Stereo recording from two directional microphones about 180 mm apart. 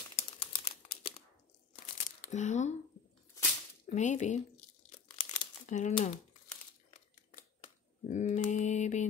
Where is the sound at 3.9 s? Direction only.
40° left (ahead or behind).